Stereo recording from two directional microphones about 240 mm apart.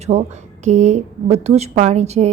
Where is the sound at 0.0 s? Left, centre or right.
Right.